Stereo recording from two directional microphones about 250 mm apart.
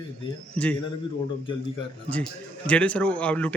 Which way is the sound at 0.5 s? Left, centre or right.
Centre.